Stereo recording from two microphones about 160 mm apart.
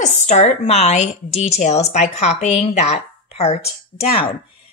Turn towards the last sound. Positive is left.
turn(degrees=35)  # may be behind; listen again after turning